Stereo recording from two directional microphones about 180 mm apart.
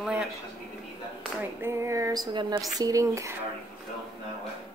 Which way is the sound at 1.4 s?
15° right (ahead or behind).